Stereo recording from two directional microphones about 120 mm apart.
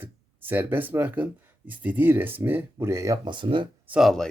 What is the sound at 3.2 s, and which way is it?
Speech, 45° right (ahead or behind).